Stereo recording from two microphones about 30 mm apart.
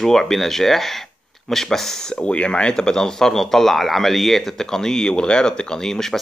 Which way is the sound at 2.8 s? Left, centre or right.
Left.